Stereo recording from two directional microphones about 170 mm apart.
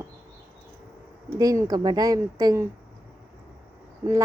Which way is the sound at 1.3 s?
20° right (ahead or behind).